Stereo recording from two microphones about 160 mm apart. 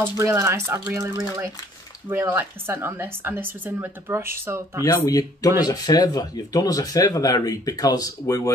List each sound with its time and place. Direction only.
0.0 s speech: 15° right (ahead or behind)
4.8 s speech: 25° left (ahead or behind)